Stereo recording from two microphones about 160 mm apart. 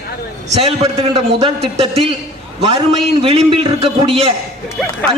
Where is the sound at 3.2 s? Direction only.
35° right (ahead or behind).